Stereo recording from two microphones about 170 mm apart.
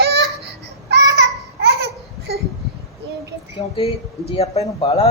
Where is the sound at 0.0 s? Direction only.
75° right (ahead or behind).